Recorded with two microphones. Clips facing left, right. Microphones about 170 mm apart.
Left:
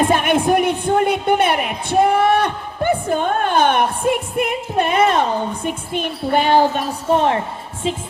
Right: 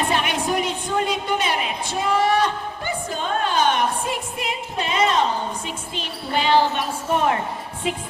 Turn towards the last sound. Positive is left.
turn(degrees=30)  # may be behind; listen again after turning